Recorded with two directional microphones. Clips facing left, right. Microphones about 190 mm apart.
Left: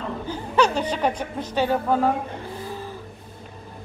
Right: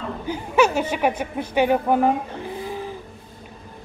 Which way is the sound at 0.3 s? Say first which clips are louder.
Right 3 dB; 10° right (ahead or behind).